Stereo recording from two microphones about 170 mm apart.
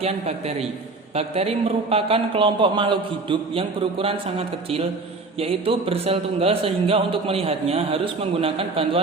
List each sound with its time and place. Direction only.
0.0 s speech: 40° right (ahead or behind)